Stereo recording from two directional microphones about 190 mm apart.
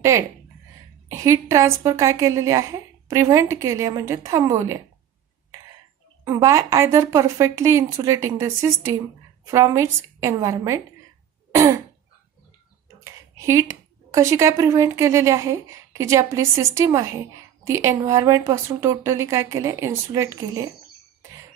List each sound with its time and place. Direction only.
0.1 s a woman's voice: 15° right (ahead or behind)
6.2 s a woman's voice: 15° right (ahead or behind)
11.5 s throat clearing: 15° right (ahead or behind)
13.0 s a woman's voice: 15° right (ahead or behind)